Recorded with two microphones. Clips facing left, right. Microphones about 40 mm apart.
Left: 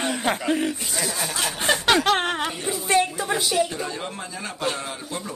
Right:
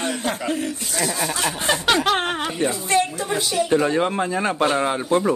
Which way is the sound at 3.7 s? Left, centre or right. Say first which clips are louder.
Right 12 dB; right.